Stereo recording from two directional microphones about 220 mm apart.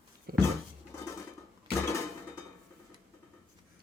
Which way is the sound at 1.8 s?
15° left (ahead or behind).